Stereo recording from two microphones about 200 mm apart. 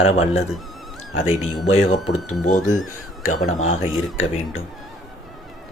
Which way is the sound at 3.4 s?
90° left.